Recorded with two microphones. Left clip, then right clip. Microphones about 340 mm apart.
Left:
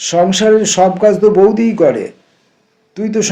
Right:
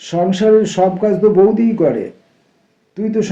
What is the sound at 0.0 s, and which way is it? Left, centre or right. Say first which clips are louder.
A man's voice: left 4 dB; left.